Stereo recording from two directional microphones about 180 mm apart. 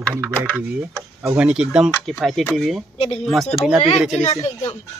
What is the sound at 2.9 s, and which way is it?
Speech, 35° left (ahead or behind).